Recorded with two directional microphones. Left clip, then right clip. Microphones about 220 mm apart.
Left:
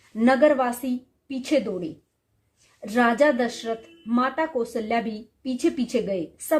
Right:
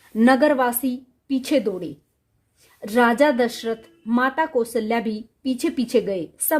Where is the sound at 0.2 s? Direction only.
50° right (ahead or behind).